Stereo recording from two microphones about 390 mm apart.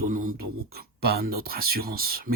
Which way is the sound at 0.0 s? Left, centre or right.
Right.